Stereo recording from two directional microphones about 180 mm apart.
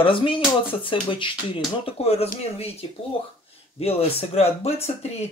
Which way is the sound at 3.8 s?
35° left (ahead or behind).